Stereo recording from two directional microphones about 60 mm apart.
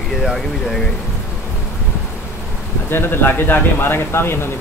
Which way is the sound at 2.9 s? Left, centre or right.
Left.